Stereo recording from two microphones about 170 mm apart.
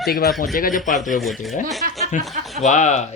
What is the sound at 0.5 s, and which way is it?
Speech, 55° left (ahead or behind).